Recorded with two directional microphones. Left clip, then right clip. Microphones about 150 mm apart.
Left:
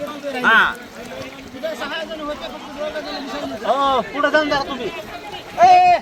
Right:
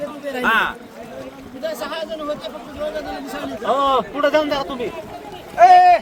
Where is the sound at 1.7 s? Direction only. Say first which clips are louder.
Even; 15° right (ahead or behind).